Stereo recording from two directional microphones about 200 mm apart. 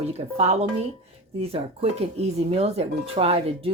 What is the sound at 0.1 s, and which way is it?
Speech, 30° right (ahead or behind).